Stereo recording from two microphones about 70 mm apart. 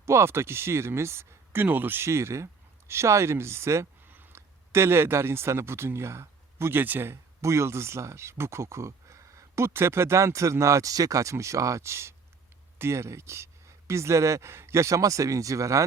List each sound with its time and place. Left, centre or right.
0.0 s speech: right
1.6 s speech: right